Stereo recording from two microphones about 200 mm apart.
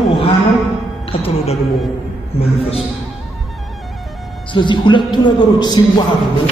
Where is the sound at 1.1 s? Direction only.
30° left (ahead or behind).